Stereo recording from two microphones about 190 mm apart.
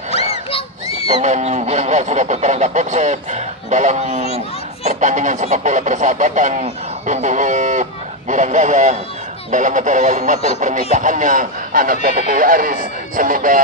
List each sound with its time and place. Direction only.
0.1 s a sound: 30° left (ahead or behind)
1.2 s speech: 40° right (ahead or behind)
4.8 s honk: 40° right (ahead or behind)
9.5 s speech: 40° right (ahead or behind)